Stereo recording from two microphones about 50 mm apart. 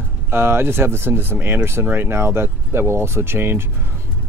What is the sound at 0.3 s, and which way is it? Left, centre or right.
Speech, right.